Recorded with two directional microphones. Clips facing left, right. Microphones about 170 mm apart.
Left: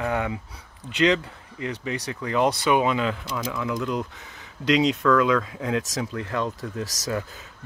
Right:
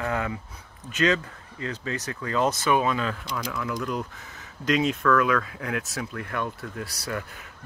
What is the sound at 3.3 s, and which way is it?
Speech, 5° left (ahead or behind).